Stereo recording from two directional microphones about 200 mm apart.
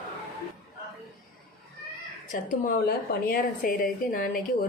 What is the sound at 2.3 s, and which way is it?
A woman's voice, 45° left (ahead or behind).